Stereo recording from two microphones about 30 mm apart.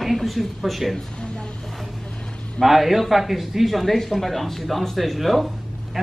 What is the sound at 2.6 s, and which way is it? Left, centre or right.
A man's voice, centre.